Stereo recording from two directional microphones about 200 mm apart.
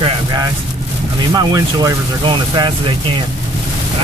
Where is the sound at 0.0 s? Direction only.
15° right (ahead or behind).